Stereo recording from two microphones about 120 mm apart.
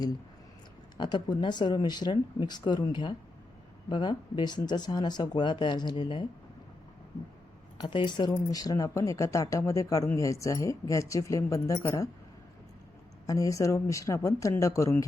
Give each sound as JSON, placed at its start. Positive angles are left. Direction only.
{"t": 0.9, "sound": "speech", "side_deg": 40}
{"t": 7.8, "sound": "speech", "side_deg": 40}
{"t": 13.2, "sound": "speech", "side_deg": 30}